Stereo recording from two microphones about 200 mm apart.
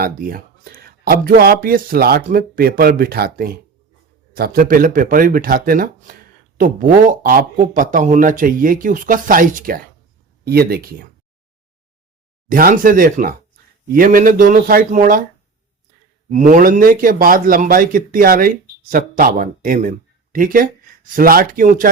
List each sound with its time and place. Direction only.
0.0 s speech: 45° right (ahead or behind)
12.5 s speech: 45° right (ahead or behind)
16.3 s speech: 40° right (ahead or behind)